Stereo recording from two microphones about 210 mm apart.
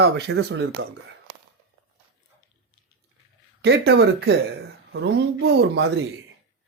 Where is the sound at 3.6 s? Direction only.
50° right (ahead or behind).